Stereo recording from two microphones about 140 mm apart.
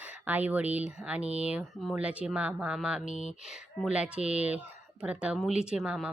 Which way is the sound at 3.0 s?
55° left (ahead or behind).